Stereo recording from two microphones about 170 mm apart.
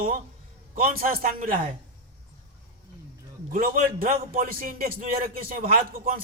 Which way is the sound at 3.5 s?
50° right (ahead or behind).